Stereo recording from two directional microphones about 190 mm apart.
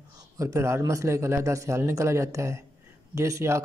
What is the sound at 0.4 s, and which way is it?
Speech, 15° right (ahead or behind).